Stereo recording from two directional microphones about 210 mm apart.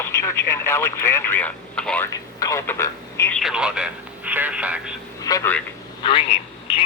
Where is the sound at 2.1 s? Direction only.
15° left (ahead or behind).